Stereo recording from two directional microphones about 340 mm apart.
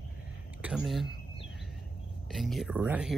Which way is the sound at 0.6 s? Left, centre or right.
Centre.